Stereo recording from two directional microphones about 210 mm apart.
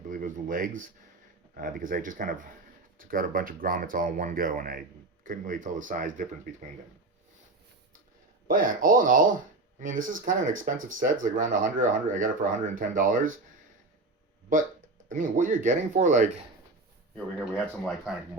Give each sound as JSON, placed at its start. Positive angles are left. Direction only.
{"t": 0.1, "sound": "speech", "side_deg": -40}
{"t": 8.4, "sound": "speech", "side_deg": -40}
{"t": 15.1, "sound": "speech", "side_deg": -40}
{"t": 17.2, "sound": "speech", "side_deg": 5}